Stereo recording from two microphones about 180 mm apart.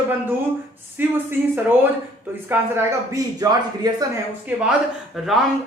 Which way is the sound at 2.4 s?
10° right (ahead or behind).